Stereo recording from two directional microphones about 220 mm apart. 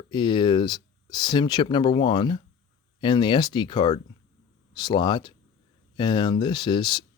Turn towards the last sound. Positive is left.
turn(degrees=20)  # may be behind; listen again after turning